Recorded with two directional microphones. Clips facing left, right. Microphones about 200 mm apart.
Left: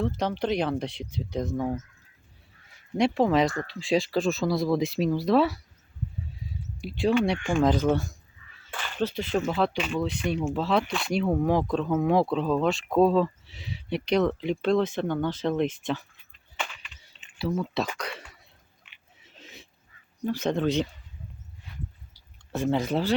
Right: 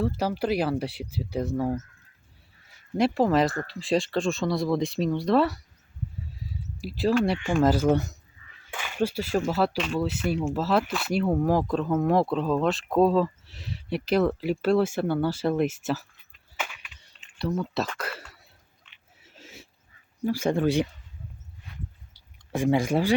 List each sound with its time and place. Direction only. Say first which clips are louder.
0.2 s speech: right 1 dB; 5° right (ahead or behind)
3.0 s speech: even; centre (ahead or behind)
6.3 s a sound: right 1 dB; centre (ahead or behind)
7.4 s speech: right 1 dB; 5° right (ahead or behind)
7.9 s speech: right 3 dB; 20° right (ahead or behind)
8.6 s a sound: right 2 dB; 10° right (ahead or behind)
9.4 s speech: right 1 dB; 5° right (ahead or behind)
16.6 s typing: even; 5° right (ahead or behind)
18.8 s chewing: left 1 dB; 10° left (ahead or behind)
19.2 s a sound: right 1 dB; 5° right (ahead or behind)
20.2 s speech: right 2 dB; 10° right (ahead or behind)
22.5 s speech: right 2 dB; 10° right (ahead or behind)